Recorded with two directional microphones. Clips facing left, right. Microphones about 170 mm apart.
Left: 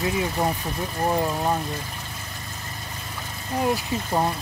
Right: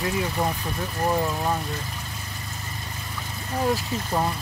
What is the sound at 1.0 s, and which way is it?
Speech, 20° left (ahead or behind).